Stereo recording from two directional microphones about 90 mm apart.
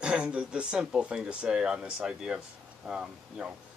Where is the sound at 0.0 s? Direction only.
10° right (ahead or behind).